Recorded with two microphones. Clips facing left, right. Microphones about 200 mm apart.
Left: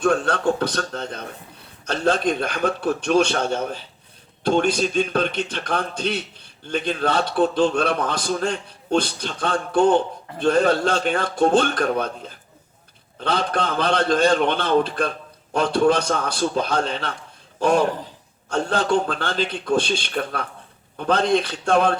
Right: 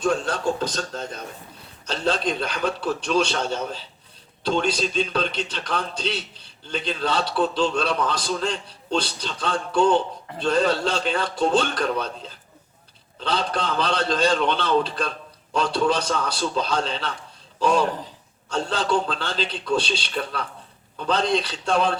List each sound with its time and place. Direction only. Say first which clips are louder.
0.0 s a man's voice: left 3 dB; 55° left (ahead or behind)
1.9 s a man's voice: left 4 dB; 50° left (ahead or behind)